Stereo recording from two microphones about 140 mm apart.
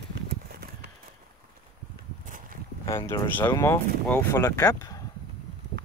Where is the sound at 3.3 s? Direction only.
15° left (ahead or behind).